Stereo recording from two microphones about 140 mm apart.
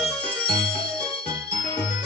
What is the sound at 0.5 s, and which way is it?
Music, 35° left (ahead or behind).